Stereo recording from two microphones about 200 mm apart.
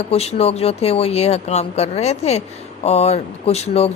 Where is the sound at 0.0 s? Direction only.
30° left (ahead or behind).